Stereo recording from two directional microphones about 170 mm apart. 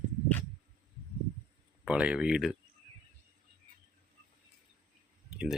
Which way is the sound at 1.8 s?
5° right (ahead or behind).